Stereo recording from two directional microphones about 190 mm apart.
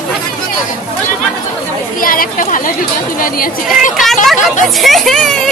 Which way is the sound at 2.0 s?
45° left (ahead or behind).